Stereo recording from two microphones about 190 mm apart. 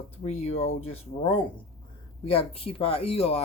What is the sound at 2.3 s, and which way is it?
Speech, 30° left (ahead or behind).